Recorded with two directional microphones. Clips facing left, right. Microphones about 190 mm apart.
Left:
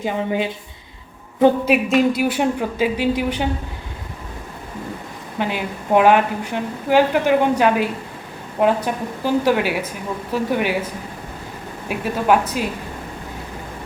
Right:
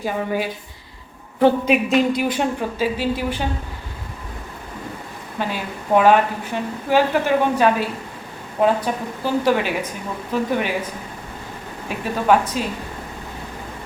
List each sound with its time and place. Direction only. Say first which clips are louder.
0.0 s a woman's voice: left 1 dB; 20° left (ahead or behind)
1.7 s a woman's voice: left 1 dB; 5° left (ahead or behind)
5.4 s a woman's voice: left 2 dB; 15° left (ahead or behind)
11.9 s a woman's voice: even; 5° left (ahead or behind)